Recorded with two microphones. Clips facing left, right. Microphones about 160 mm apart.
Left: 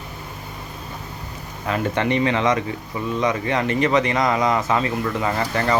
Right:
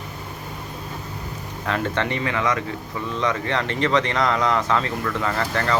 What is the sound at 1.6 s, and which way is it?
Speech, 5° left (ahead or behind).